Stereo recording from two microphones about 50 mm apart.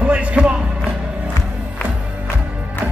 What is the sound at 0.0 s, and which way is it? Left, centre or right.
Music, right.